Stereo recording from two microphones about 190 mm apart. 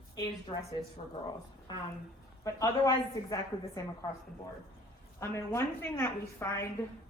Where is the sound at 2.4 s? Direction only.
15° left (ahead or behind).